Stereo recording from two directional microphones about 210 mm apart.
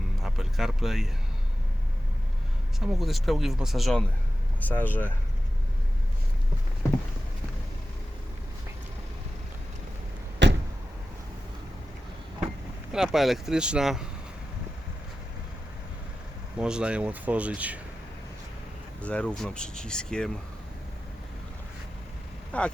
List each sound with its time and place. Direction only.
0.2 s a sound: centre (ahead or behind)
2.8 s speech: centre (ahead or behind)
10.4 s vehicle: 60° right (ahead or behind)
12.9 s speech: centre (ahead or behind)
16.6 s speech: 5° right (ahead or behind)
19.0 s speech: 5° left (ahead or behind)
22.5 s speech: 5° left (ahead or behind)